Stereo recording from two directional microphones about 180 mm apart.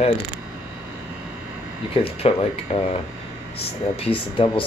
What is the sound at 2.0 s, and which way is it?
Speech, 30° left (ahead or behind).